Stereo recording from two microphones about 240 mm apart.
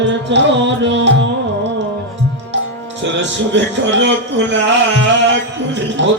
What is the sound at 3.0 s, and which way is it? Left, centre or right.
Music, right.